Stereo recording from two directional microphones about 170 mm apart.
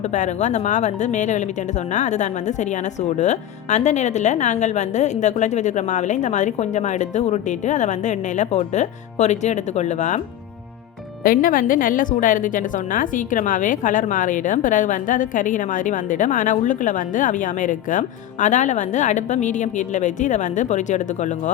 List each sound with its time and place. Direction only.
0.1 s a woman's voice: 45° left (ahead or behind)
11.2 s a woman's voice: 55° left (ahead or behind)